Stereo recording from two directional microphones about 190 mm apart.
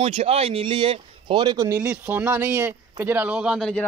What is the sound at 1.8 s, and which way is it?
Speech, 5° right (ahead or behind).